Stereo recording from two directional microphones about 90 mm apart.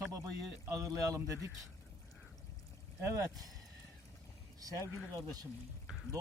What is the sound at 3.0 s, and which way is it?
Speech, 35° right (ahead or behind).